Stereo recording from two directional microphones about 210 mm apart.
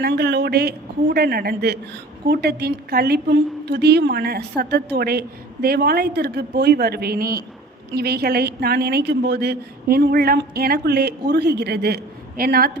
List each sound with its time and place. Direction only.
0.0 s a woman's voice: 50° right (ahead or behind)